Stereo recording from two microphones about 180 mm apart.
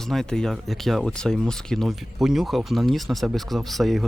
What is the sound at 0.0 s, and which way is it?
Speech, centre (ahead or behind).